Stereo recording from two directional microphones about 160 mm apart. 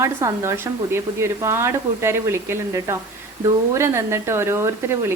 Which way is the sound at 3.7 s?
15° right (ahead or behind).